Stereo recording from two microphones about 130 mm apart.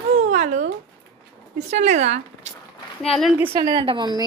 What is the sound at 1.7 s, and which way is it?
Speech, 60° right (ahead or behind).